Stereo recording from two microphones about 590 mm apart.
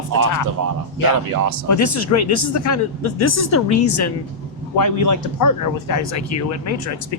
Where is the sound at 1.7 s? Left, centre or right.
Left.